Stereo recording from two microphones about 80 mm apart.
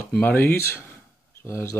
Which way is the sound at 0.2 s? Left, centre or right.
Left.